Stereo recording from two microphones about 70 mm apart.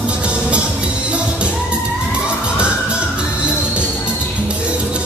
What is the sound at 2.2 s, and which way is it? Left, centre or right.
Music, centre.